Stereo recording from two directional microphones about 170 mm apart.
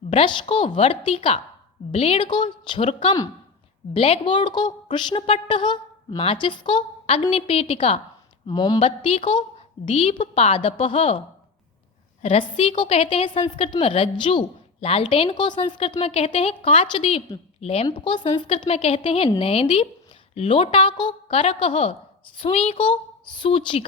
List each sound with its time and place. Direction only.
0.1 s a woman's voice: 30° left (ahead or behind)
12.2 s a woman's voice: 35° left (ahead or behind)